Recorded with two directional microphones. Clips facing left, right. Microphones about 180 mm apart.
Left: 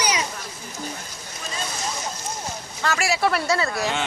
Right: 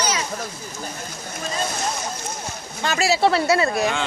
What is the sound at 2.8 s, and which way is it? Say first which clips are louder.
Speech: right 3 dB; 20° right (ahead or behind).